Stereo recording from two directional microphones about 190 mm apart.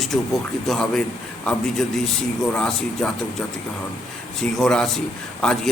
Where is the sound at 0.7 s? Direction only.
5° left (ahead or behind).